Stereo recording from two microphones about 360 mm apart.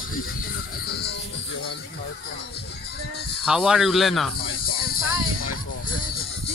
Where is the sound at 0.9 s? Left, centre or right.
Left.